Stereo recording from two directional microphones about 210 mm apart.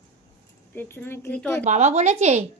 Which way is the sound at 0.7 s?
10° left (ahead or behind).